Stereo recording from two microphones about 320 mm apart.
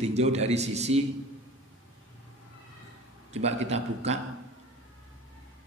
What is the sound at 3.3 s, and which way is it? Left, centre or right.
Speech, centre.